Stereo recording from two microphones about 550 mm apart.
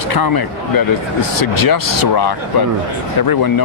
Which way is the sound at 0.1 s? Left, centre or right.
Left.